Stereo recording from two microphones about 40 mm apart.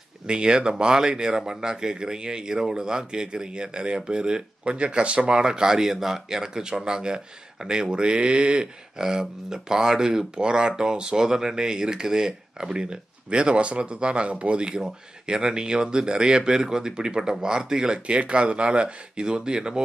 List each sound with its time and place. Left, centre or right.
0.3 s speech: right
5.4 s speech: centre
14.7 s speech: centre